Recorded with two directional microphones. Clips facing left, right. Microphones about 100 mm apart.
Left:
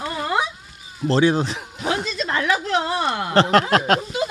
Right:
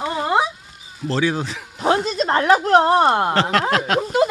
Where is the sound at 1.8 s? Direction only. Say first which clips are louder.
Right 6 dB; 40° right (ahead or behind).